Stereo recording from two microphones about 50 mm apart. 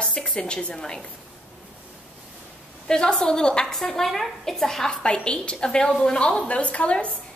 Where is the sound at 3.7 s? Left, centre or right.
Centre.